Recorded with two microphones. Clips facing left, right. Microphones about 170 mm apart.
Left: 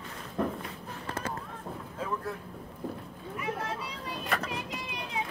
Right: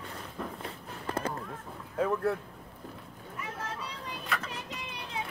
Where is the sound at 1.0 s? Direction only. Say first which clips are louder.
Right 3 dB; 30° right (ahead or behind).